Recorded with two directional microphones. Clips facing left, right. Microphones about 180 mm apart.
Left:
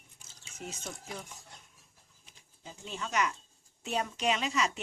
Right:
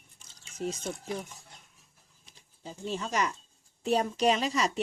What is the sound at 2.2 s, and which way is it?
Speech, 35° right (ahead or behind).